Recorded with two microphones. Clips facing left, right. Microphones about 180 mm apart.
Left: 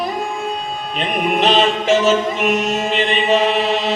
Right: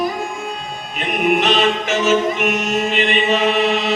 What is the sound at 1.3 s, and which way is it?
Music, 30° left (ahead or behind).